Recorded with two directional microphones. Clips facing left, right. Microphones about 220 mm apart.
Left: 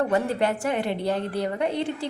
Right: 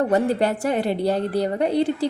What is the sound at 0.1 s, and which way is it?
A woman's voice, 35° right (ahead or behind).